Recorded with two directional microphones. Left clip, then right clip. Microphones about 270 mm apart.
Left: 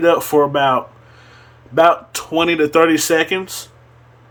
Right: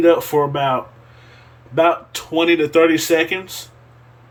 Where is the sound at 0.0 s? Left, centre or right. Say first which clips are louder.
Left 1 dB; centre.